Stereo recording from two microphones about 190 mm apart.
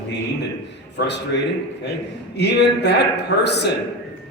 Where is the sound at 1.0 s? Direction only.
65° left (ahead or behind).